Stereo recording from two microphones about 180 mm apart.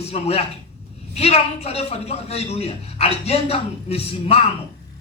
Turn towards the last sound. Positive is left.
turn(degrees=35)  # may be behind; listen again after turning